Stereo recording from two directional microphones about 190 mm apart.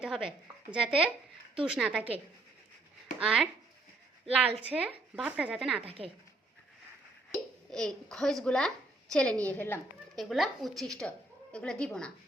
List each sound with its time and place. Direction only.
0.0 s speech: 5° right (ahead or behind)
3.2 s a woman's voice: 5° right (ahead or behind)
5.8 s a woman's voice: 30° right (ahead or behind)
7.3 s a child's voice: 5° left (ahead or behind)
10.2 s speech: centre (ahead or behind)